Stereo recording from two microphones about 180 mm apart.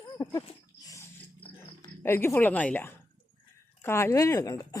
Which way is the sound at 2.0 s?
15° left (ahead or behind).